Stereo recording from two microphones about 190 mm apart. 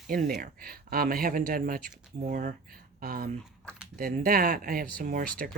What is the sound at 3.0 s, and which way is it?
Speech, 50° right (ahead or behind).